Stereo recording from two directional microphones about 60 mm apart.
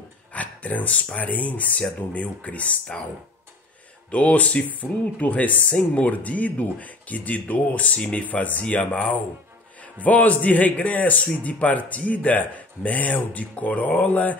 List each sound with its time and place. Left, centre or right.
0.3 s speech: left
4.1 s speech: left
10.0 s speech: left